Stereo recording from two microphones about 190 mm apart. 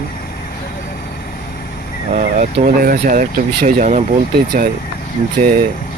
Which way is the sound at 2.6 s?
45° right (ahead or behind).